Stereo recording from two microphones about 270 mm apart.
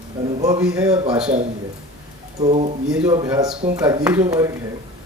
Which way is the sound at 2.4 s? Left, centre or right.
Right.